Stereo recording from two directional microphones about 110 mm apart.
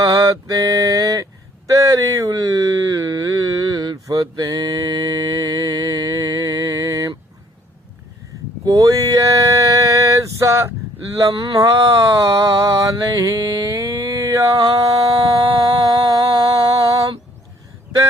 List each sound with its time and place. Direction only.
0.0 s a sound: 30° right (ahead or behind)
8.6 s mantra: 35° right (ahead or behind)
15.7 s music: 30° right (ahead or behind)